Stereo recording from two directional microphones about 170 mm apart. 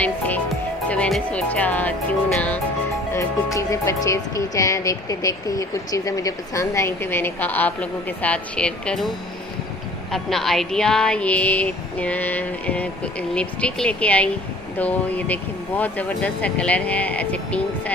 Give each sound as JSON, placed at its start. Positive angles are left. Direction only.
{"t": 0.8, "sound": "speech", "side_deg": 5}
{"t": 3.1, "sound": "speech", "side_deg": 15}
{"t": 10.1, "sound": "speech", "side_deg": 0}